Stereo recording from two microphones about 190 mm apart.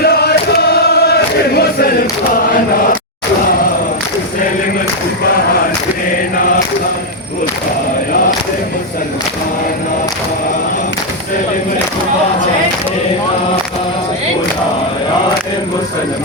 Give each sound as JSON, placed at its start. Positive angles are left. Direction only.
{"t": 0.0, "sound": "chant", "side_deg": 55}